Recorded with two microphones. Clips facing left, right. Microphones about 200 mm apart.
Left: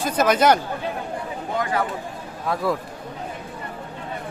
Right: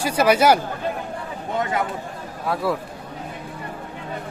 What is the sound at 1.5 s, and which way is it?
Speech, 25° right (ahead or behind).